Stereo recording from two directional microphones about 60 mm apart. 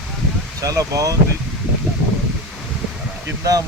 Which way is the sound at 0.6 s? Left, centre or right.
Right.